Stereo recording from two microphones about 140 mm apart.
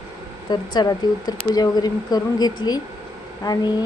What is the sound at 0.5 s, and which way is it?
A woman's voice, 30° left (ahead or behind).